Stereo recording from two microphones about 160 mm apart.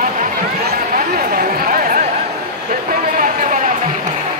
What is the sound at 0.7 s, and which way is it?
Chatter, 65° right (ahead or behind).